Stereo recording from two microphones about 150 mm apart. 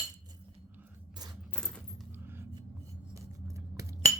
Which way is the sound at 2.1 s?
15° right (ahead or behind).